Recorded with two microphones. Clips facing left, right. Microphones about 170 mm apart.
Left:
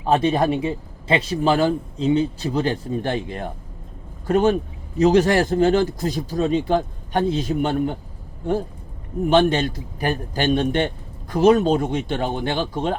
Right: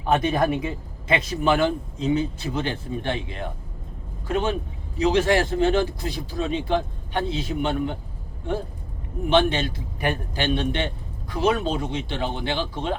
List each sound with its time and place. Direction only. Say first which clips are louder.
0.0 s a man's voice: left 3 dB; 30° left (ahead or behind)
9.3 s a man's voice: left 3 dB; 45° left (ahead or behind)